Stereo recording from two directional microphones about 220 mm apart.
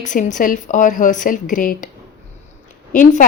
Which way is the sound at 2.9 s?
35° left (ahead or behind).